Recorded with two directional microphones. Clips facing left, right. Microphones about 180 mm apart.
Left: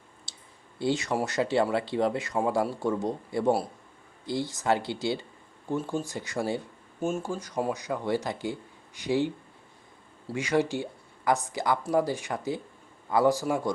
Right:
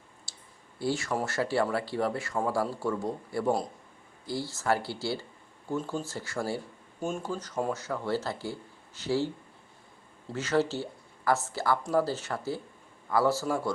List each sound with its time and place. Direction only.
0.3 s clicking: 20° left (ahead or behind)
0.8 s a man's voice: 20° left (ahead or behind)